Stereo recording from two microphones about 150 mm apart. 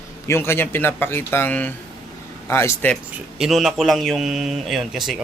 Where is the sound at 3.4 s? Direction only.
Centre (ahead or behind).